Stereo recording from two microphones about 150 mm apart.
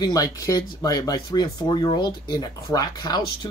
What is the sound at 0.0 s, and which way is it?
Speech, 25° left (ahead or behind).